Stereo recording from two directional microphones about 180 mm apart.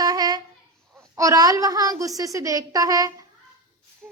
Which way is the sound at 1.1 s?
20° right (ahead or behind).